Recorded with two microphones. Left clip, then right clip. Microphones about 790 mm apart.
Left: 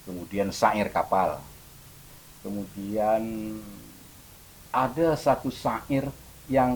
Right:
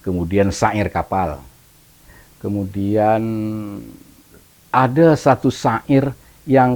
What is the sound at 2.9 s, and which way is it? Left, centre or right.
Speech, right.